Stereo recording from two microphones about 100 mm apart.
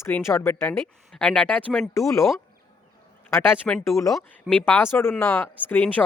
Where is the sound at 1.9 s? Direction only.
30° left (ahead or behind).